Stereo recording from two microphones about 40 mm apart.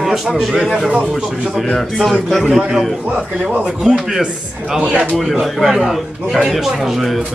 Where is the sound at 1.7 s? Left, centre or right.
Centre.